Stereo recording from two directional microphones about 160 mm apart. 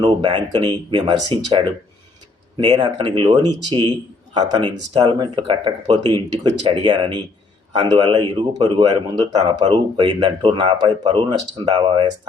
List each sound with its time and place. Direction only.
0.0 s speech: 30° right (ahead or behind)